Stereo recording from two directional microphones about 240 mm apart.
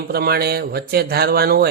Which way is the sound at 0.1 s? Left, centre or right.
Right.